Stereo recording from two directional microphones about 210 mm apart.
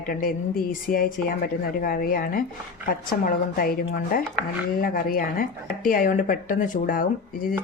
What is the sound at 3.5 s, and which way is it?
Speech, 45° left (ahead or behind).